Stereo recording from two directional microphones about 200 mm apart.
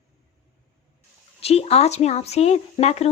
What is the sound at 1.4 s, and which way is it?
Speech, 30° left (ahead or behind).